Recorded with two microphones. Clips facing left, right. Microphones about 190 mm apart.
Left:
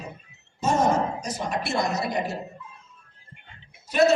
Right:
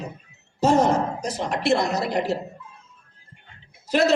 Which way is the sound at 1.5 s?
75° right (ahead or behind).